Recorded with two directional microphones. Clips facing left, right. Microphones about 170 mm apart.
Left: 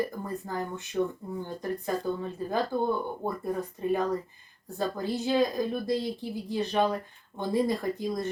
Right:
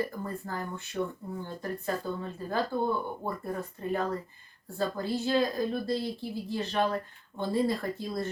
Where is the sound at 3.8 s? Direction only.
15° left (ahead or behind).